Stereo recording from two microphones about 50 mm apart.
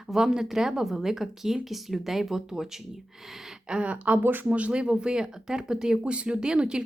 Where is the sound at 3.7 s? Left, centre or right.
Right.